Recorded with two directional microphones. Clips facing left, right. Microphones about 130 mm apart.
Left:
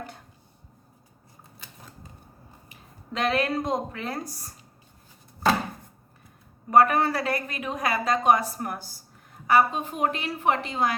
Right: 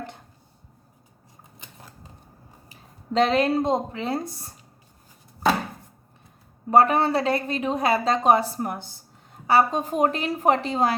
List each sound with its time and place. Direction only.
2.6 s speech: 30° right (ahead or behind)
6.7 s a woman's voice: 30° right (ahead or behind)
9.5 s a woman's voice: 35° right (ahead or behind)